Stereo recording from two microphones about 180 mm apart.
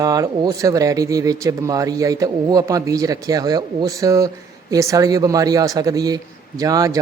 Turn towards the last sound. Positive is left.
turn(degrees=-20)  # may be behind; listen again after turning